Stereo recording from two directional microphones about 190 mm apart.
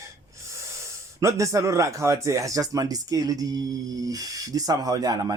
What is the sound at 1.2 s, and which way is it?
Speech, 15° right (ahead or behind).